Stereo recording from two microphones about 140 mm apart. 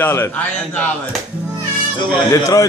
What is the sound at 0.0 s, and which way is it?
Speech, 15° left (ahead or behind).